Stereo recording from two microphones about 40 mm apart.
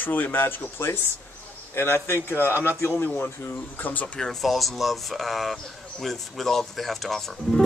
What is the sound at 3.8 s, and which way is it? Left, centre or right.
Speech, left.